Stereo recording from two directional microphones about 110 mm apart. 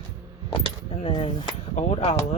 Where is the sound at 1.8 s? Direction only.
70° left (ahead or behind).